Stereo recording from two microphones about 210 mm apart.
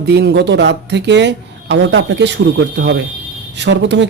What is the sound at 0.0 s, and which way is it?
Speech, 50° right (ahead or behind).